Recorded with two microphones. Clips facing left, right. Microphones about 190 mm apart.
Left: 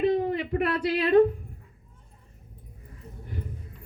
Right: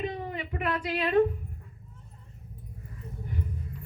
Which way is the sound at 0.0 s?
40° left (ahead or behind).